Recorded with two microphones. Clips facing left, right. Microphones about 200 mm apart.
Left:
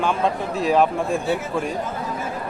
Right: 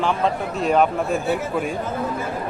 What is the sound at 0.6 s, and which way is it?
Speech, centre (ahead or behind).